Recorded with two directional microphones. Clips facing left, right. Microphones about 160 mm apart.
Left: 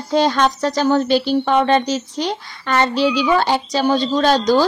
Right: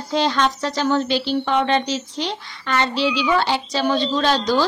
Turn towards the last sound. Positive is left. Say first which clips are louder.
# left 4 dB
turn(degrees=45)  # may be behind; listen again after turning